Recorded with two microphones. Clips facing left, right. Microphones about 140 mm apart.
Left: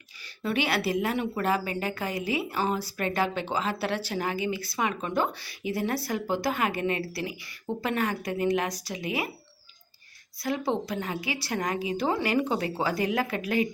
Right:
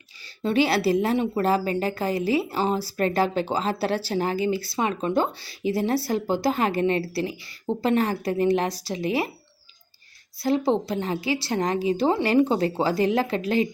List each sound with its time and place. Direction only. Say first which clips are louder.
0.4 s a woman's voice: right 6 dB; 30° right (ahead or behind)
10.3 s a woman's voice: right 6 dB; 30° right (ahead or behind)